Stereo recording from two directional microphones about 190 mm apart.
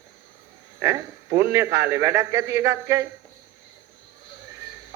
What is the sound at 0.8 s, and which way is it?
A man's voice, 15° right (ahead or behind).